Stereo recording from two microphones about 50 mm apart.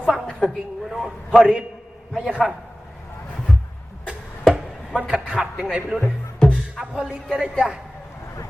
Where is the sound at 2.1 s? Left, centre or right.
Centre.